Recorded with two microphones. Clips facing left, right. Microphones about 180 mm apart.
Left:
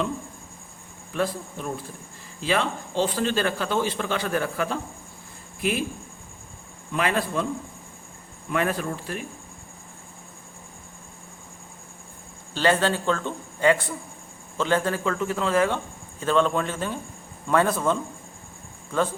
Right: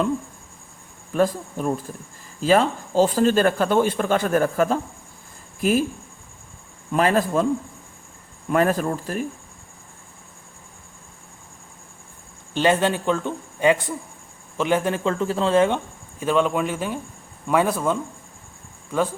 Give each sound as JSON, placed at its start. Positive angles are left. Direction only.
{"t": 1.1, "sound": "a man's voice", "side_deg": -45}
{"t": 6.9, "sound": "speech", "side_deg": -40}
{"t": 8.5, "sound": "speech", "side_deg": -40}
{"t": 12.5, "sound": "a man's voice", "side_deg": -20}
{"t": 16.2, "sound": "speech", "side_deg": -10}